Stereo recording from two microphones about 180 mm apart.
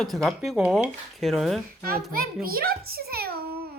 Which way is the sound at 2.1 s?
55° right (ahead or behind).